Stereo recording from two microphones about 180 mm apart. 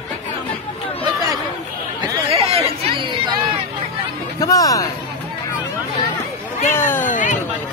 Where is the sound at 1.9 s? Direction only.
30° right (ahead or behind).